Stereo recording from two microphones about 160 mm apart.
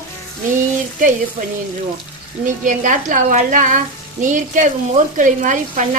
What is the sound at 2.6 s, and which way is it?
Speech, 55° right (ahead or behind).